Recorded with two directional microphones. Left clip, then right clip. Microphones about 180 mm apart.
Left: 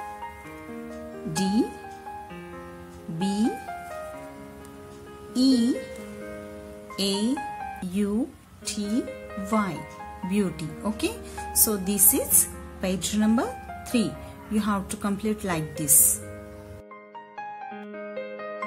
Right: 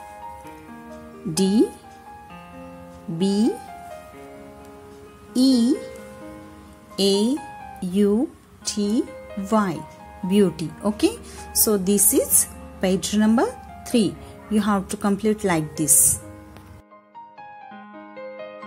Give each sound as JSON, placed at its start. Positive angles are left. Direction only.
{"t": 1.3, "sound": "speech", "side_deg": -40}
{"t": 3.2, "sound": "speech", "side_deg": -35}
{"t": 5.3, "sound": "speech", "side_deg": -40}
{"t": 7.0, "sound": "speech", "side_deg": -40}
{"t": 18.1, "sound": "music", "side_deg": 0}